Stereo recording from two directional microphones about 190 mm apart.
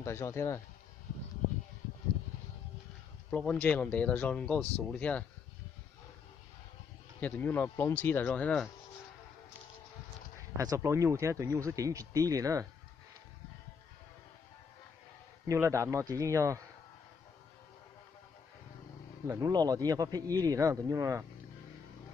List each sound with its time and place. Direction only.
0.0 s speech: 15° left (ahead or behind)
3.3 s speech: 5° left (ahead or behind)
7.2 s speech: 10° left (ahead or behind)
10.6 s speech: 15° right (ahead or behind)
15.4 s speech: 15° right (ahead or behind)
19.2 s speech: 15° right (ahead or behind)